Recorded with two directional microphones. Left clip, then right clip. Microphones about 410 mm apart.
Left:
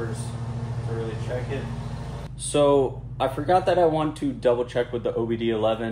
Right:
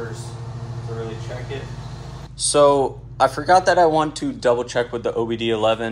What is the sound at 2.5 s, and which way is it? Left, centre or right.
Speech, centre.